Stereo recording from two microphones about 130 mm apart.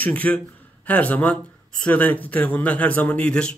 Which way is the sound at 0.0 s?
10° left (ahead or behind).